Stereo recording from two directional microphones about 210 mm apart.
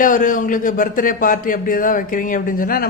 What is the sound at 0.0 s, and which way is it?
A man's voice, 40° left (ahead or behind).